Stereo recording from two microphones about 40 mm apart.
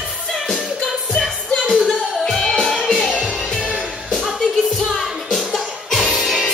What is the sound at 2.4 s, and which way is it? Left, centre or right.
Music, centre.